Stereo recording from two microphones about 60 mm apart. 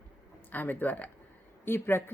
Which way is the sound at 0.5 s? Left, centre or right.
Left.